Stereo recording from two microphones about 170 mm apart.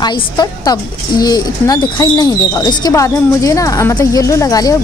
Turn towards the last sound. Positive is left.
turn(degrees=20)  # may be behind; listen again after turning